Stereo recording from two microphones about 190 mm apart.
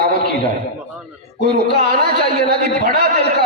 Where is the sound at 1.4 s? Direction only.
55° right (ahead or behind).